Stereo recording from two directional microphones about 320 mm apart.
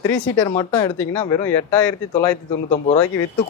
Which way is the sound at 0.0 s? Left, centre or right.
Centre.